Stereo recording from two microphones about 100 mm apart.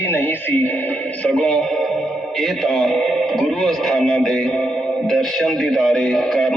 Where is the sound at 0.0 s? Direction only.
20° left (ahead or behind); by 1.9 s 5° left (ahead or behind).